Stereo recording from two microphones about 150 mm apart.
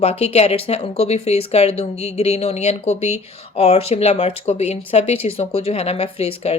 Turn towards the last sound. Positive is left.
turn(degrees=40)  # may be behind; listen again after turning